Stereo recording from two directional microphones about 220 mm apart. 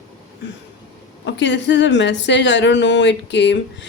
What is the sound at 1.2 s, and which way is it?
A woman's voice, 55° left (ahead or behind).